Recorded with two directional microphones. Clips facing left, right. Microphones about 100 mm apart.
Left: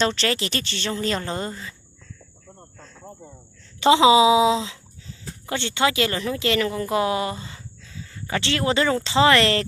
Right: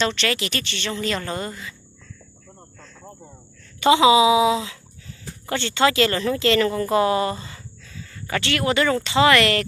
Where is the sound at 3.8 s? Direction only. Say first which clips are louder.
Even; 30° left (ahead or behind).